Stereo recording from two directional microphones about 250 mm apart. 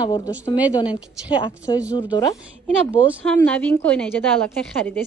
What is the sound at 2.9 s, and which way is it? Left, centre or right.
A woman's voice, centre.